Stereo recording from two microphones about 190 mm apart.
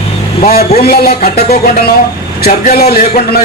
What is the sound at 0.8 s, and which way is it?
Speech, 55° left (ahead or behind).